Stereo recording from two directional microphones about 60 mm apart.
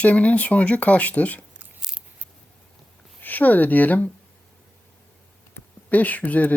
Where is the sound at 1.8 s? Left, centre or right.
Centre.